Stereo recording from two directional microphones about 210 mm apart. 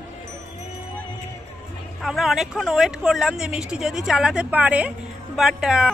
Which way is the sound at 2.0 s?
Centre (ahead or behind).